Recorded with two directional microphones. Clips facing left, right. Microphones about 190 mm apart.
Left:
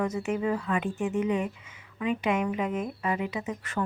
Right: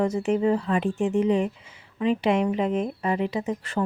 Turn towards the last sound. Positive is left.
turn(degrees=-30)  # may be behind; listen again after turning